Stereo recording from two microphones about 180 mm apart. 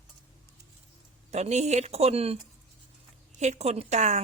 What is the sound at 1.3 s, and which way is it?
Speech, 40° right (ahead or behind).